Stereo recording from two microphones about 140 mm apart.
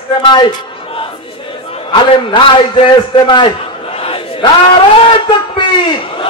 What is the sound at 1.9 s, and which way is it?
A man's voice, 35° left (ahead or behind).